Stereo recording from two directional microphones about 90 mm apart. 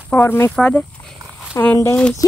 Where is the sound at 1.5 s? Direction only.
35° left (ahead or behind).